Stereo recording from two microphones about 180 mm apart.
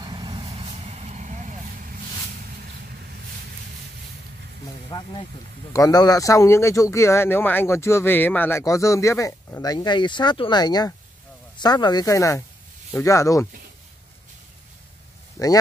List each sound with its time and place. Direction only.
0.0 s vehicle: 25° right (ahead or behind); by 2.0 s 45° right (ahead or behind)
4.8 s speech: 25° left (ahead or behind)
15.3 s speech: 20° left (ahead or behind)